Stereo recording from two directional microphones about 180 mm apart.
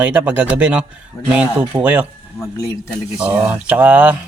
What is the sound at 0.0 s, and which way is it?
Speech, 10° right (ahead or behind).